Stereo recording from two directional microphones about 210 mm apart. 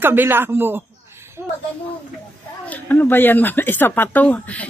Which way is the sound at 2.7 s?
10° left (ahead or behind).